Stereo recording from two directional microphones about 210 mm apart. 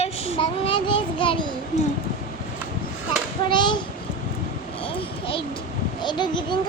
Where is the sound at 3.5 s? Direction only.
20° left (ahead or behind).